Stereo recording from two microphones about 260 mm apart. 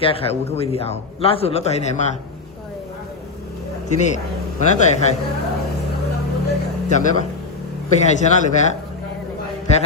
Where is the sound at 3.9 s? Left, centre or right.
Left.